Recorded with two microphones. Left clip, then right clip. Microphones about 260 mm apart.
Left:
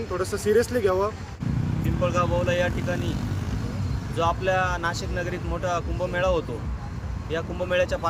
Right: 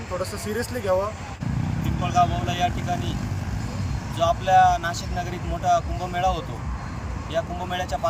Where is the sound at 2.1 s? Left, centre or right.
Centre.